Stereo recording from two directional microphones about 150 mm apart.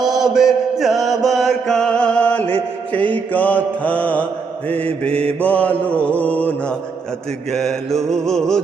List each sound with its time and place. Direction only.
0.2 s chant: centre (ahead or behind)
4.7 s mantra: 40° right (ahead or behind)
5.4 s chant: 10° left (ahead or behind)
7.5 s music: centre (ahead or behind)